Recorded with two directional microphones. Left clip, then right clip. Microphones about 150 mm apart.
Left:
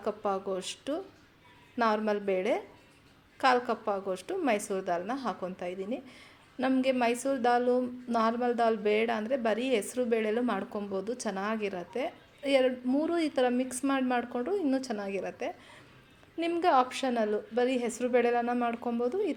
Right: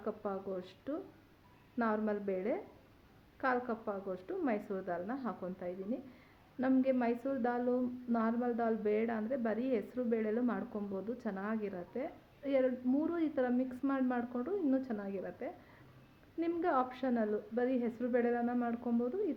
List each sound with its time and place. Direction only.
0.0 s a woman's voice: 25° left (ahead or behind)